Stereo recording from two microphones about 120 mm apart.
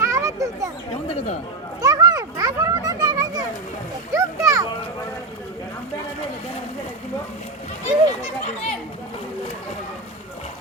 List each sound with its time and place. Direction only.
0.0 s children playing: 25° right (ahead or behind)
1.0 s speech: 55° left (ahead or behind)
1.8 s children playing: 30° right (ahead or behind)
4.1 s a sound: 25° right (ahead or behind)
8.2 s children playing: 65° left (ahead or behind)